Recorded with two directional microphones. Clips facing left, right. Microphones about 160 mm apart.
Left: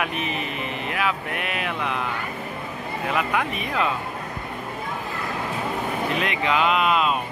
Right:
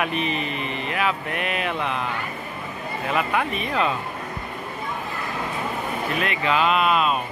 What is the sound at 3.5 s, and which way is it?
Speech, 10° left (ahead or behind).